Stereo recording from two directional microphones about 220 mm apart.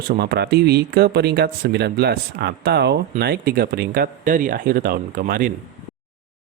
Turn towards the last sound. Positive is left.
turn(degrees=-40)  # may be behind; listen again after turning